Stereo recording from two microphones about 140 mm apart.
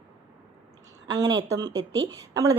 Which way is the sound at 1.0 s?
25° right (ahead or behind).